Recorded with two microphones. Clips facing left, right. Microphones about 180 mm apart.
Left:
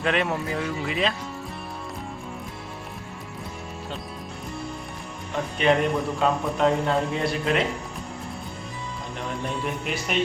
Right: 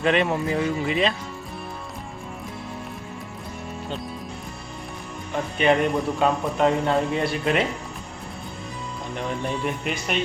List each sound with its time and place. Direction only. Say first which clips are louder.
0.0 s a man's voice: right 3 dB; centre (ahead or behind)
5.5 s a man's voice: right 1 dB; centre (ahead or behind)
9.1 s a man's voice: right 3 dB; centre (ahead or behind)